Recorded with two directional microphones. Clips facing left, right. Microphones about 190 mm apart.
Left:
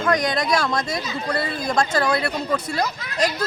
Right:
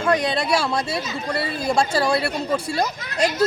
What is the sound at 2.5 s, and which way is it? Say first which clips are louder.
Speech: right 1 dB; 20° right (ahead or behind).